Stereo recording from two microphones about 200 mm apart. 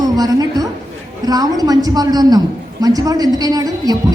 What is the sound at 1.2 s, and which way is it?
A woman's voice, 20° right (ahead or behind).